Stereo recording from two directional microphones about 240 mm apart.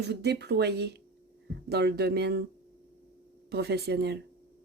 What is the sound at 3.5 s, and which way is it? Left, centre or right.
Speech, right.